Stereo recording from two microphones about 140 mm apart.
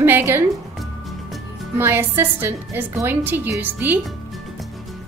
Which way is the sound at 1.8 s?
15° right (ahead or behind).